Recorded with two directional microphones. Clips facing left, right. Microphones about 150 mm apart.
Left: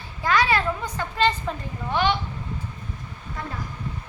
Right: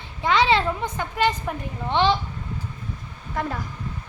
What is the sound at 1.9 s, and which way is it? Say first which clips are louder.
Speech: right 2 dB; 25° right (ahead or behind).